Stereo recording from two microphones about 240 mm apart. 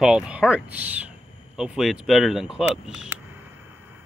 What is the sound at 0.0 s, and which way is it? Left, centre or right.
Speech, centre.